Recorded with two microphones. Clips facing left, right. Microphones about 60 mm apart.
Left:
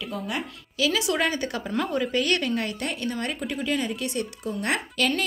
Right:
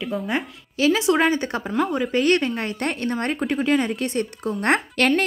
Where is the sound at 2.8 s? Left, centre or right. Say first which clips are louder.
Right 5 dB; right.